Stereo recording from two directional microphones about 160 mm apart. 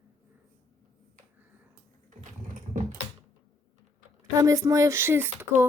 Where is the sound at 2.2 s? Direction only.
50° right (ahead or behind).